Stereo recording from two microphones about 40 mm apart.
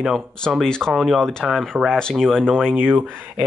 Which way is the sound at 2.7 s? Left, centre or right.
Right.